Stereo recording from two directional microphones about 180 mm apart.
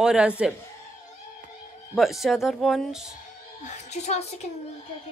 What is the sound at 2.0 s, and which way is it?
A woman's voice, centre (ahead or behind).